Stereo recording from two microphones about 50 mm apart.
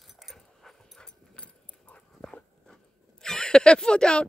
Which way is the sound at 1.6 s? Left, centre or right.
Left.